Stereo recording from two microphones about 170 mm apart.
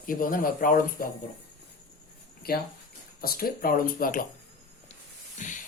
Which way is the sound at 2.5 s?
60° left (ahead or behind).